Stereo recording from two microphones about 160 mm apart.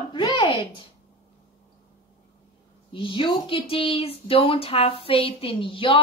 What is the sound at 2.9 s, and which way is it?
Speech, 30° left (ahead or behind).